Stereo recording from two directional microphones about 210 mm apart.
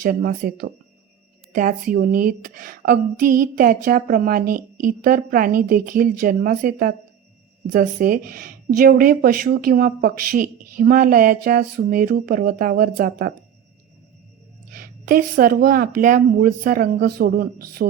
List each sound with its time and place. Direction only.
0.0 s speech: 45° right (ahead or behind)
14.7 s speech: 45° right (ahead or behind)